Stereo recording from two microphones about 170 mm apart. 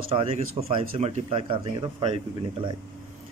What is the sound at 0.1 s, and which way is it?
A man's voice, 35° right (ahead or behind).